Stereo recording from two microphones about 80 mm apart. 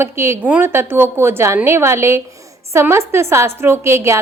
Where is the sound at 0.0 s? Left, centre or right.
Right.